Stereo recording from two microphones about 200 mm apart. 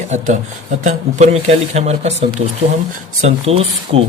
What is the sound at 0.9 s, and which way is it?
Speech, 35° right (ahead or behind).